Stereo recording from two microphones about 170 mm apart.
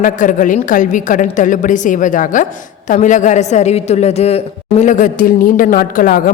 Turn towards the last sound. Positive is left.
turn(degrees=55)  # may be behind; listen again after turning